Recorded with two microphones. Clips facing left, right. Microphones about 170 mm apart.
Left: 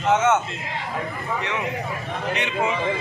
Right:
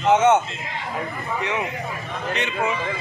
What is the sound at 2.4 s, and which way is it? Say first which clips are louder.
Speech: even; 20° left (ahead or behind).